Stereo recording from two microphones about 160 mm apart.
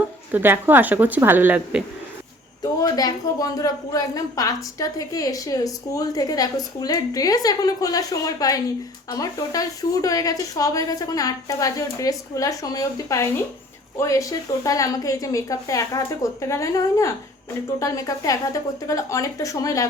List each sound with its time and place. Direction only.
0.3 s speech: 10° right (ahead or behind)
2.7 s a woman's voice: 25° left (ahead or behind)